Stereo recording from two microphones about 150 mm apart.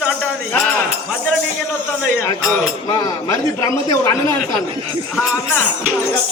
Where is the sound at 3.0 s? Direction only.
20° left (ahead or behind).